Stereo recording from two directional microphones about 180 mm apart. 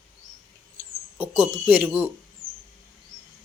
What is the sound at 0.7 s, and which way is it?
Speech, 15° right (ahead or behind).